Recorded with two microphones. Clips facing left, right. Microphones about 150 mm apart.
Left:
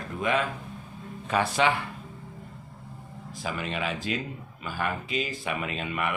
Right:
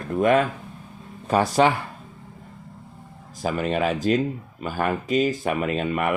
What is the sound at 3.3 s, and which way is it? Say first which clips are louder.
Speech: right 8 dB; 45° right (ahead or behind).